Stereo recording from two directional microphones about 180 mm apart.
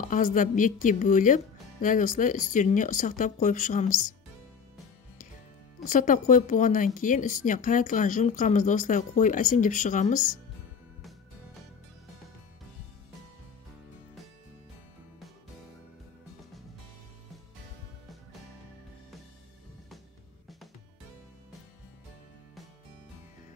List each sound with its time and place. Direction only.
0.1 s speech: 45° left (ahead or behind)
5.9 s speech: 45° left (ahead or behind)